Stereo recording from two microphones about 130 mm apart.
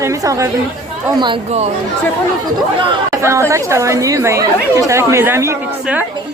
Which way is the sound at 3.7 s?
20° right (ahead or behind).